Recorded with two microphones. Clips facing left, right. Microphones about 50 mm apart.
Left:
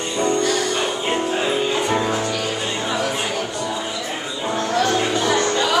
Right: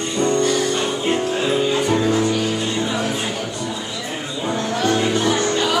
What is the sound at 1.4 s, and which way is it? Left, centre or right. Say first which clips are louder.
Music: right 2 dB; centre.